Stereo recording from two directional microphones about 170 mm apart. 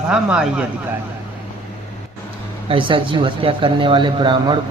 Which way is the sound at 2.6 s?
30° right (ahead or behind).